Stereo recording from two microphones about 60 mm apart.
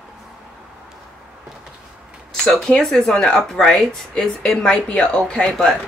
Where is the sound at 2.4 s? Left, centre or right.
Centre.